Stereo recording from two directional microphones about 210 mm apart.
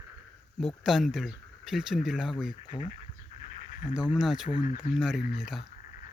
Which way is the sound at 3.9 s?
5° right (ahead or behind).